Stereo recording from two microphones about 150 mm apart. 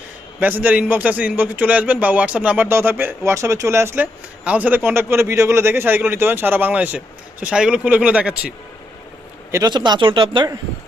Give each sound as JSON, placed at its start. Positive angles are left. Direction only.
{"t": 0.3, "sound": "a man's voice", "side_deg": -10}
{"t": 9.5, "sound": "a man's voice", "side_deg": -25}